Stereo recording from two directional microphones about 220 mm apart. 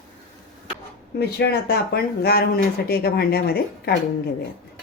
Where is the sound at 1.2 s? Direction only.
45° left (ahead or behind).